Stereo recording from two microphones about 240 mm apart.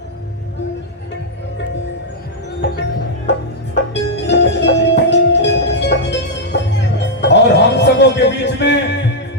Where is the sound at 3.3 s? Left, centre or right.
Left.